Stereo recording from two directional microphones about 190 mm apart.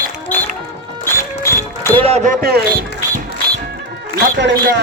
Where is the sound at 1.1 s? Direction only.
15° left (ahead or behind).